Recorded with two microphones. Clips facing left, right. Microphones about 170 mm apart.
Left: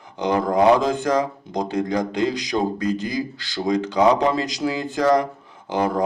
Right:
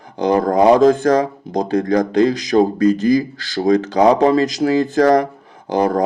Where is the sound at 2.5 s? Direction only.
45° right (ahead or behind).